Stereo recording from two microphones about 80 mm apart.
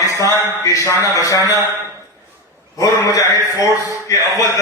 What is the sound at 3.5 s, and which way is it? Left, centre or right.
Speech, right.